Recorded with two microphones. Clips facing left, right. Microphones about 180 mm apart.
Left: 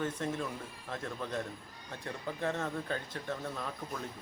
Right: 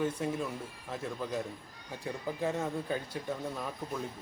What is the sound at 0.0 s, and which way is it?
Speech, 10° right (ahead or behind).